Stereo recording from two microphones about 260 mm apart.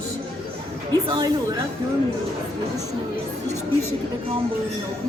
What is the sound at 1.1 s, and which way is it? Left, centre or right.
Speech, centre.